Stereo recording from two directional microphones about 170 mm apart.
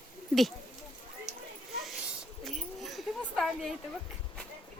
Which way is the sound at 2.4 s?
Centre (ahead or behind).